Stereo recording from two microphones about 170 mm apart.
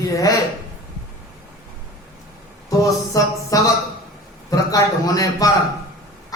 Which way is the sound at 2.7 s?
20° left (ahead or behind).